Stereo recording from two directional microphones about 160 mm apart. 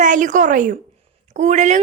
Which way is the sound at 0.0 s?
50° right (ahead or behind).